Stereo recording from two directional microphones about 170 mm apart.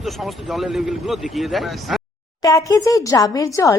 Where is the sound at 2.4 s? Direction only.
20° left (ahead or behind).